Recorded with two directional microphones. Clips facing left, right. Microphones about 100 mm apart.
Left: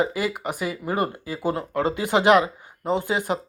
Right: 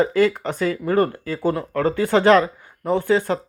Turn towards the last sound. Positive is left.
turn(degrees=15)  # may be behind; listen again after turning